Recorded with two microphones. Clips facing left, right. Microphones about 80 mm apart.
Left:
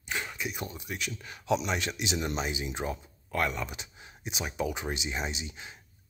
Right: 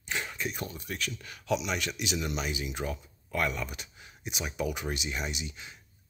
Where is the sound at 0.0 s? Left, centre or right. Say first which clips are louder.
Even; centre.